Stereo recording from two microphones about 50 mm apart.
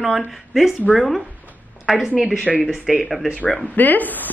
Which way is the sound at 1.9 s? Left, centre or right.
Centre.